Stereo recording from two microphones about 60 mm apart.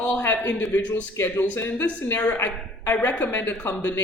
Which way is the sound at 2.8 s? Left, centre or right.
Left.